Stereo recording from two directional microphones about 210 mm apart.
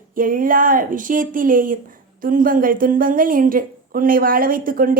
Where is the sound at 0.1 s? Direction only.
40° right (ahead or behind).